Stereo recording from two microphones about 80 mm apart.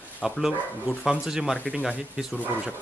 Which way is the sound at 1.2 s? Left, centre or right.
Centre.